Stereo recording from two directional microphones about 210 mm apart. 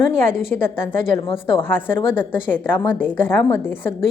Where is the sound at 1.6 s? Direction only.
10° left (ahead or behind).